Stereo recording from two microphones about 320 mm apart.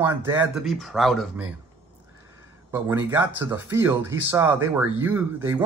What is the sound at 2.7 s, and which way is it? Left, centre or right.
Speech, centre.